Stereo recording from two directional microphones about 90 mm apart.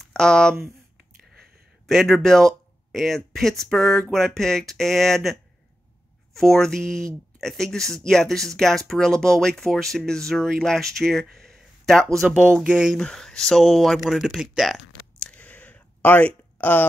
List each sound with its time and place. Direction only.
0.0 s speech: 10° left (ahead or behind)
1.9 s speech: centre (ahead or behind)
12.3 s speech: 10° right (ahead or behind)
12.9 s speech: 5° left (ahead or behind)
15.1 s a sound: 15° left (ahead or behind)